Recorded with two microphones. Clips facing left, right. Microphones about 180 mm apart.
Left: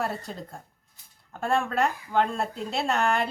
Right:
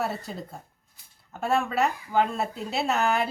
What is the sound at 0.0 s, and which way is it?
Speech, centre (ahead or behind).